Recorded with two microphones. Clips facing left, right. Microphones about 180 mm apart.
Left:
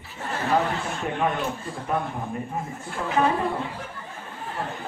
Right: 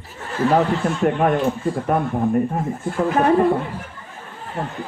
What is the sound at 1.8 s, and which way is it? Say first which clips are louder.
Speech: right 6 dB; 55° right (ahead or behind).